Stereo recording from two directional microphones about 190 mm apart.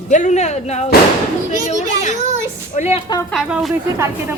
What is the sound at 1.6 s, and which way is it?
Children playing, 40° left (ahead or behind).